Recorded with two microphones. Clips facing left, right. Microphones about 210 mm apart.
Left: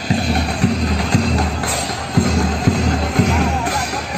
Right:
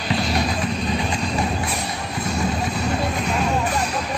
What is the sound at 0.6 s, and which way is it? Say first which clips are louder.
Music: left 5 dB; 90° left.